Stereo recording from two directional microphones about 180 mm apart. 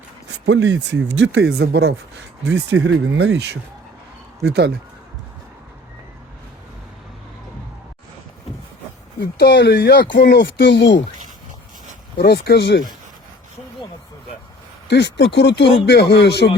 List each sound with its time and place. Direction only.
0.3 s speech: 85° right
1.0 s speech: 90° right; by 4.7 s 65° right (ahead or behind)
9.2 s speech: 70° left (ahead or behind)
12.1 s speech: 60° left (ahead or behind)
14.8 s speech: 75° left (ahead or behind)